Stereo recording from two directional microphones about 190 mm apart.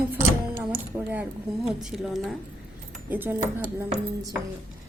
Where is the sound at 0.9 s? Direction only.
20° right (ahead or behind).